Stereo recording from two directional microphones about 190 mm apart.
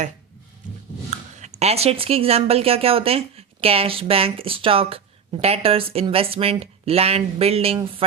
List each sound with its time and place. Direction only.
1.1 s speech: 35° right (ahead or behind)